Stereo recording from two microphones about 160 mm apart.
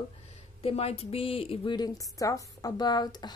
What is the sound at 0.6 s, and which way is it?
A woman's voice, 40° left (ahead or behind).